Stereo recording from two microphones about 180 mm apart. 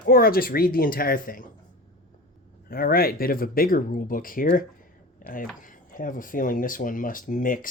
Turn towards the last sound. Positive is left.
turn(degrees=50)  # may be behind; listen again after turning